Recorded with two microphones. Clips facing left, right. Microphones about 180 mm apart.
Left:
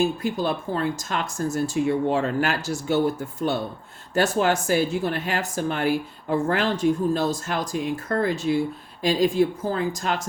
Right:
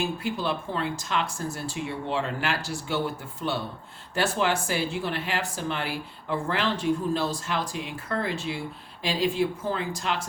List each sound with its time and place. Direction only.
0.2 s speech: 45° left (ahead or behind)